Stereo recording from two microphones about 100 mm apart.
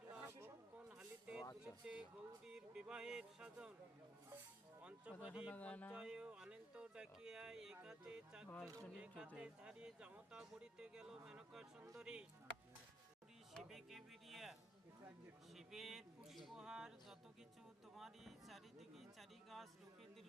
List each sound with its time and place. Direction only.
0.9 s a sound: 10° right (ahead or behind)
1.6 s speech: 10° right (ahead or behind)
4.8 s speech: 10° right (ahead or behind)
5.5 s speech: 15° left (ahead or behind)
5.9 s speech: 10° right (ahead or behind)
8.6 s speech: 35° right (ahead or behind)
9.0 s speech: 10° right (ahead or behind)
13.5 s speech: centre (ahead or behind)
15.5 s speech: 5° right (ahead or behind)